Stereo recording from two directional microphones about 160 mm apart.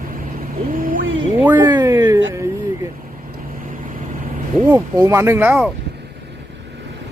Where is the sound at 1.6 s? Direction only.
25° right (ahead or behind).